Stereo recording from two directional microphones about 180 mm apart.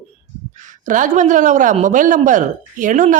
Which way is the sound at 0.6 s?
45° right (ahead or behind).